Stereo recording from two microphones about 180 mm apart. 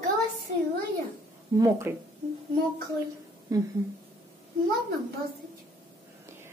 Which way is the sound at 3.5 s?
20° right (ahead or behind).